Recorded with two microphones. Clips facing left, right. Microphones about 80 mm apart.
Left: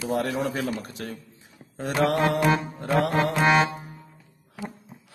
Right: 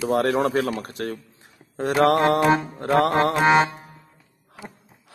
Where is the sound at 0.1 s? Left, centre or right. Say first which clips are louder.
Right 6 dB; right.